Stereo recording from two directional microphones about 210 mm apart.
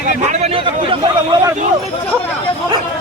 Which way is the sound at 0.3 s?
30° right (ahead or behind).